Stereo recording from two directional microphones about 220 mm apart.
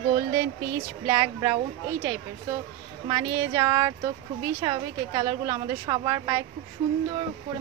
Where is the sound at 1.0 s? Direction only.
20° right (ahead or behind).